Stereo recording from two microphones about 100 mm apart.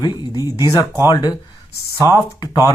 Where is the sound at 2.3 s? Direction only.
40° left (ahead or behind).